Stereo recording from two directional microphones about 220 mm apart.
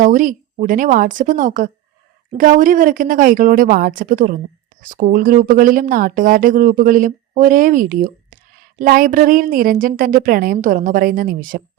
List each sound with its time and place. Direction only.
0.0 s speech: 35° right (ahead or behind)